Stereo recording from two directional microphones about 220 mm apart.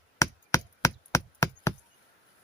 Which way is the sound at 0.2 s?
15° left (ahead or behind).